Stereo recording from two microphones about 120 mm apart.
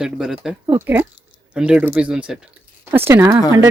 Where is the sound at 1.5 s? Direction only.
10° right (ahead or behind).